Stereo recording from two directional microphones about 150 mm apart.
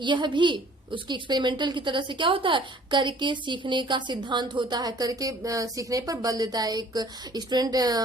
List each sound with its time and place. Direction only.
0.0 s a woman's voice: 30° right (ahead or behind)